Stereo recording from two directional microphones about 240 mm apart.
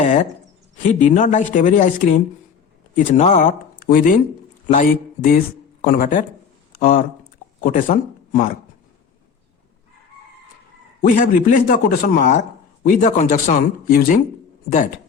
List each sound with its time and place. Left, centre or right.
0.0 s a woman's voice: left
11.1 s speech: left